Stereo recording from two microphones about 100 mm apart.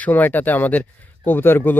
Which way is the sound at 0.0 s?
15° left (ahead or behind).